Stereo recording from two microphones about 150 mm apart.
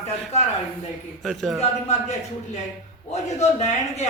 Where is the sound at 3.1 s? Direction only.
50° left (ahead or behind).